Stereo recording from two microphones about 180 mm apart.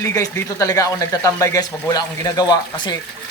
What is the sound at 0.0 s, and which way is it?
Speech, 15° left (ahead or behind).